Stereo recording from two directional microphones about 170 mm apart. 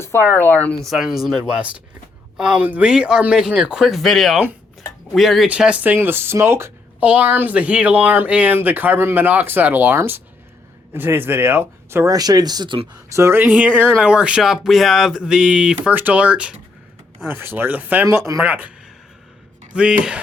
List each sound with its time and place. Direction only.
0.0 s speech: 15° left (ahead or behind); by 12.9 s 30° right (ahead or behind)
13.1 s speech: 15° right (ahead or behind)
19.7 s speech: 5° right (ahead or behind)